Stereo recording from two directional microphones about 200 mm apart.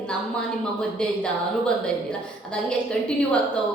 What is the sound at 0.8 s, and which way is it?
A woman's voice, 5° left (ahead or behind).